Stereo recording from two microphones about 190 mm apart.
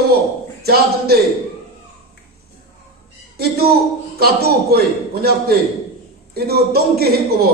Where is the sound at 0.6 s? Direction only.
55° right (ahead or behind).